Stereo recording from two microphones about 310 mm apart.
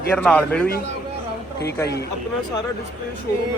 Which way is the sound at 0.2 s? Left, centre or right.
Centre.